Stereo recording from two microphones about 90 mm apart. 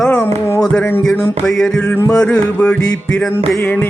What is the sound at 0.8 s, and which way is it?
Speech, 25° left (ahead or behind).